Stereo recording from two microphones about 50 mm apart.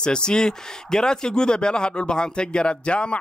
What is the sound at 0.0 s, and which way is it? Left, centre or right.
Speech, centre.